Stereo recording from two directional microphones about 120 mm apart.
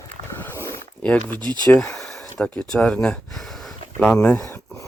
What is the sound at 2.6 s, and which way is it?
Speech, 10° left (ahead or behind).